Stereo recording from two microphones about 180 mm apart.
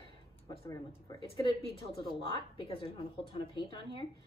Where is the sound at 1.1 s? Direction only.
30° left (ahead or behind).